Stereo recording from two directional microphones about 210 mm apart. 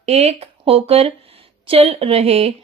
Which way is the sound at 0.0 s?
30° right (ahead or behind).